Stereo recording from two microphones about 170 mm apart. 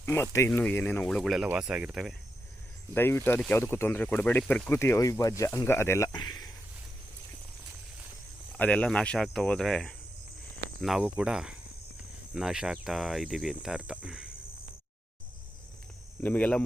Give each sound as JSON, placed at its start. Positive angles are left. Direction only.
{"t": 0.0, "sound": "speech", "side_deg": 15}
{"t": 1.5, "sound": "cricket", "side_deg": -5}
{"t": 2.9, "sound": "speech", "side_deg": 15}
{"t": 8.5, "sound": "cricket", "side_deg": 10}
{"t": 16.2, "sound": "speech", "side_deg": 10}